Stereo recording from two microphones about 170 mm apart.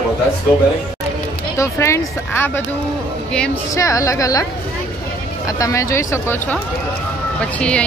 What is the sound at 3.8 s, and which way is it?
Speech, 20° left (ahead or behind).